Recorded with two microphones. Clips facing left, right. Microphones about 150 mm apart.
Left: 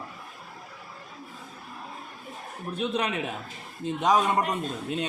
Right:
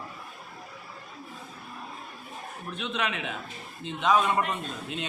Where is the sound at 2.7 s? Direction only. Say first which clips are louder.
Left 4 dB; 35° left (ahead or behind).